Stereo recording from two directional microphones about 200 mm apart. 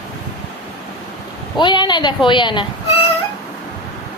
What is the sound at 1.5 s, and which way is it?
A woman's voice, 20° left (ahead or behind).